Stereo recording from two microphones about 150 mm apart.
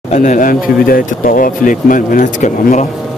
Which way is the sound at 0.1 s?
55° left (ahead or behind).